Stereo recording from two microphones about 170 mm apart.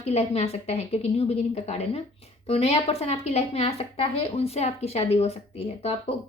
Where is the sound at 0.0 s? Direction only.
40° left (ahead or behind).